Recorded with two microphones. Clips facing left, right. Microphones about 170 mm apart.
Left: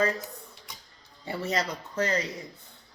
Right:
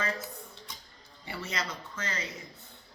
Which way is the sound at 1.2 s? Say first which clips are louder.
Left 7 dB; 40° left (ahead or behind).